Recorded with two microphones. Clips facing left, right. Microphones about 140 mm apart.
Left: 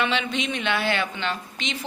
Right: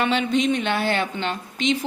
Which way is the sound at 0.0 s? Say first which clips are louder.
Right 5 dB; 45° right (ahead or behind).